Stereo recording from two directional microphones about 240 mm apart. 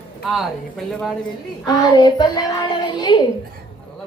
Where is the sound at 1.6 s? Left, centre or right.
Centre.